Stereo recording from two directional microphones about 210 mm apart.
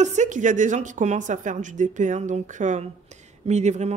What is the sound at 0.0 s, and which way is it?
A woman's voice, 35° right (ahead or behind).